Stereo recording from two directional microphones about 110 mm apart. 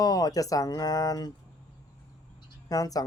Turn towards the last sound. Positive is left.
turn(degrees=35)  # may be behind; listen again after turning